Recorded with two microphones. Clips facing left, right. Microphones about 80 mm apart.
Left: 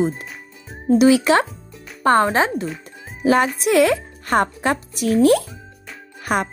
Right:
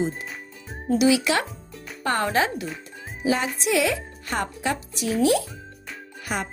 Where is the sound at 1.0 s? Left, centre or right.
Left.